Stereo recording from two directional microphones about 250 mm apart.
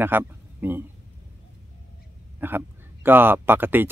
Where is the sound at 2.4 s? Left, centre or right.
Centre.